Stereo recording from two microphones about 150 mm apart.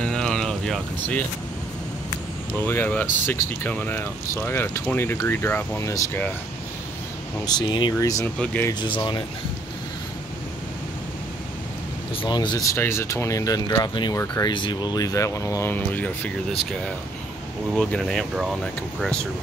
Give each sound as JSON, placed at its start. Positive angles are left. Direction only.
{"t": 0.0, "sound": "a sound", "side_deg": 5}
{"t": 2.6, "sound": "speech", "side_deg": 10}
{"t": 7.4, "sound": "speech", "side_deg": 30}
{"t": 8.8, "sound": "speech", "side_deg": 30}
{"t": 12.2, "sound": "speech", "side_deg": 30}
{"t": 17.7, "sound": "speech", "side_deg": 5}